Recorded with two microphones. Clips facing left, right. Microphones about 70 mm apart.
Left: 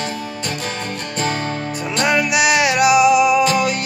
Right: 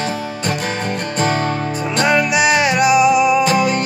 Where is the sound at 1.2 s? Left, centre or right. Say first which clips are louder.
Right 4 dB; right.